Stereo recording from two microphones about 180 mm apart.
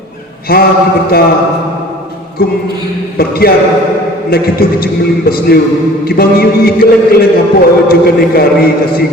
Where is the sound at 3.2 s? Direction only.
60° left (ahead or behind).